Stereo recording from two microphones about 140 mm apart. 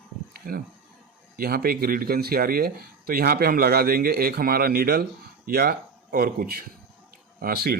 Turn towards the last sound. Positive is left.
turn(degrees=-90)